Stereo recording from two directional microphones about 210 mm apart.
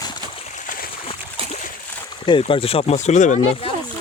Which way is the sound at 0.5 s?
40° left (ahead or behind).